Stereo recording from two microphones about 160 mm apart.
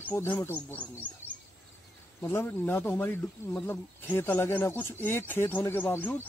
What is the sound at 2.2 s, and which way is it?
Speech, 15° left (ahead or behind).